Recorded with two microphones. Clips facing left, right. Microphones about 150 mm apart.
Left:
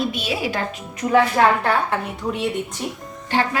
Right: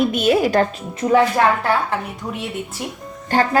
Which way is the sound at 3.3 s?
45° right (ahead or behind).